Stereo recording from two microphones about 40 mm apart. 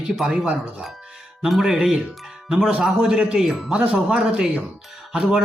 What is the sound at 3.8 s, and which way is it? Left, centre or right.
Speech, right.